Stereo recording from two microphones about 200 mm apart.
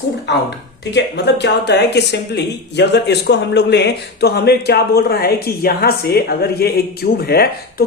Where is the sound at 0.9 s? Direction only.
60° left (ahead or behind).